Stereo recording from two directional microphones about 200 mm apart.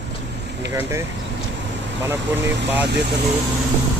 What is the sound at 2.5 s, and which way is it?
Speech, 60° right (ahead or behind).